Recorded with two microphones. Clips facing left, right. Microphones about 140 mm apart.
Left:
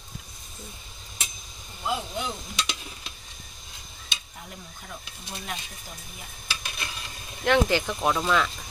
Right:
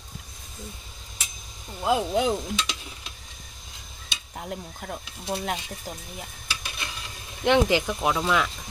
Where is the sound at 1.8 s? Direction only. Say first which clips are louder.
Right 7 dB; 90° right.